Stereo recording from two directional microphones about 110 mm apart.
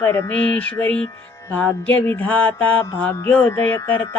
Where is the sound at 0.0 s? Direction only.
25° left (ahead or behind).